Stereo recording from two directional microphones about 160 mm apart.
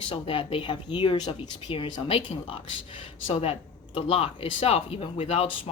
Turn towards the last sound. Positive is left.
turn(degrees=35)  # may be behind; listen again after turning